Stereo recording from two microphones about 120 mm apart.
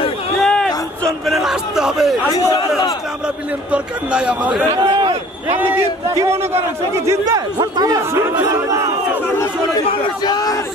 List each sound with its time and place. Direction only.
0.4 s a man's voice: 5° left (ahead or behind)
2.3 s speech: 30° left (ahead or behind)
3.7 s speech: 10° right (ahead or behind)
4.7 s speech: 30° right (ahead or behind)
7.1 s speech: 25° right (ahead or behind)
10.2 s speech: 35° left (ahead or behind)